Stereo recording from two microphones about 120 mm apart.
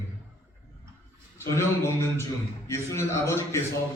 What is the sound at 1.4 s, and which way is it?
Speech, 25° left (ahead or behind).